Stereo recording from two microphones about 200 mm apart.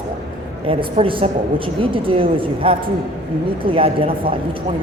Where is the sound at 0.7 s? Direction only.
25° right (ahead or behind).